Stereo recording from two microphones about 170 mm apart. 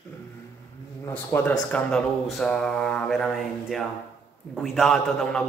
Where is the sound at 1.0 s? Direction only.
10° left (ahead or behind).